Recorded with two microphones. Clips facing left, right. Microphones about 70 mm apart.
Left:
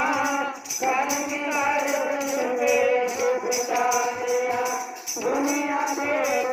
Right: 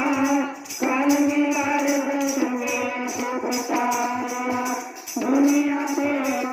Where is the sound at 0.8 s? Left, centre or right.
Centre.